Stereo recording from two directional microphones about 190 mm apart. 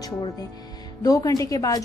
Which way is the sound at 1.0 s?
20° left (ahead or behind).